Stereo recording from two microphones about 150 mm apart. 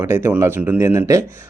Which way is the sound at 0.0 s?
15° right (ahead or behind).